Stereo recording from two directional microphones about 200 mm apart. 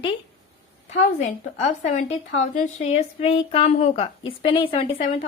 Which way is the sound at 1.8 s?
35° left (ahead or behind).